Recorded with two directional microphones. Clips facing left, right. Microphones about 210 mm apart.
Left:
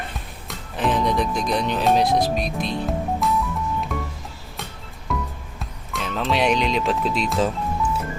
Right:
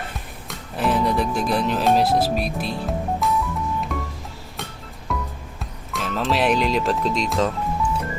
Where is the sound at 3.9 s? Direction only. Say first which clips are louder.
Even; centre (ahead or behind).